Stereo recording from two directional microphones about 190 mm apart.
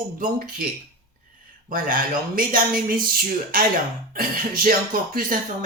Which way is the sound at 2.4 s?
50° right (ahead or behind).